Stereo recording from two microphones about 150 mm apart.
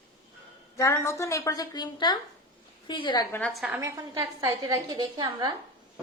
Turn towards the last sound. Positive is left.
turn(degrees=-30)  # may be behind; listen again after turning